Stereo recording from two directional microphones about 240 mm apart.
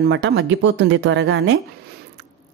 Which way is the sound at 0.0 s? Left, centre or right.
Right.